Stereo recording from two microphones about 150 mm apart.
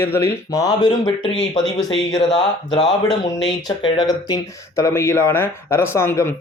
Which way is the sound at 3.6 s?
30° left (ahead or behind).